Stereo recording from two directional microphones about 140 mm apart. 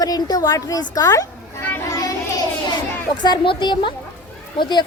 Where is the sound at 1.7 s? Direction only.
25° left (ahead or behind).